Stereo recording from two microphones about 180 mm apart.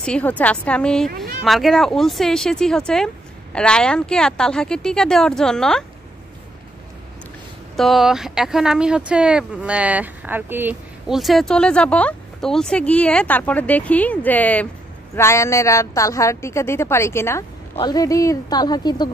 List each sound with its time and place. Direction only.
0.0 s a woman's voice: 5° left (ahead or behind)
7.7 s a woman's voice: centre (ahead or behind); by 19.0 s 25° left (ahead or behind)